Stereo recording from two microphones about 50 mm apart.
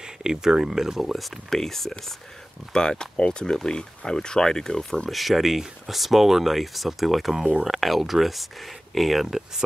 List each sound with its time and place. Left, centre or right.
0.0 s speech: centre
5.1 s speech: centre